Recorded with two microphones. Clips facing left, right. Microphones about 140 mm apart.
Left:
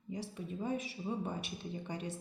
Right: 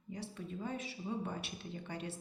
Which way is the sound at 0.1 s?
15° left (ahead or behind).